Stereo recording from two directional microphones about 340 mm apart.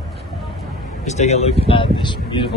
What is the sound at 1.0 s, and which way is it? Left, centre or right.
Speech, centre.